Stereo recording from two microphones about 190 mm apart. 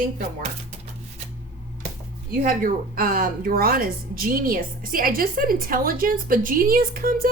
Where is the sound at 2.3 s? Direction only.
50° right (ahead or behind).